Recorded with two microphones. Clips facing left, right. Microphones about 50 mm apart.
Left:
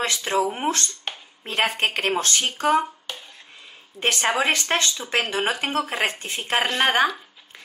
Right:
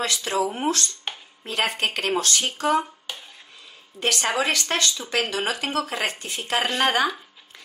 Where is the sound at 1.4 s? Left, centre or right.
Left.